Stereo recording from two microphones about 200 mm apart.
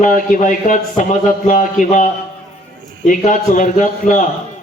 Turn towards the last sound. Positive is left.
turn(degrees=40)  # may be behind; listen again after turning